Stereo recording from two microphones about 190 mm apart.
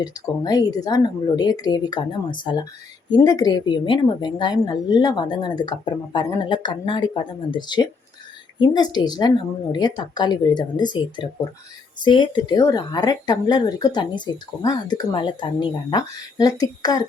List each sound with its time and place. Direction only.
0.0 s speech: 20° left (ahead or behind)